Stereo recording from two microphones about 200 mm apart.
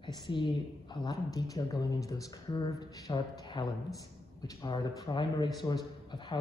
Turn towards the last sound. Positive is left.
turn(degrees=20)  # may be behind; listen again after turning